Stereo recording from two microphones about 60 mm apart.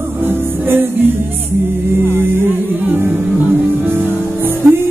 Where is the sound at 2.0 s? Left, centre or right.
Left.